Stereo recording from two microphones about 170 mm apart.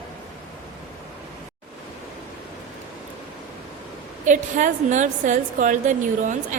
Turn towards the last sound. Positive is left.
turn(degrees=-50)  # may be behind; listen again after turning